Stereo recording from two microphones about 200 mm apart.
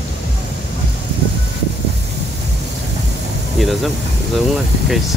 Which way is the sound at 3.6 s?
Centre (ahead or behind).